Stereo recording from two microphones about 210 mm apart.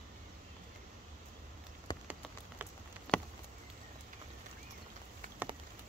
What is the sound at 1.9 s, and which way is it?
Rain on surface, 20° left (ahead or behind).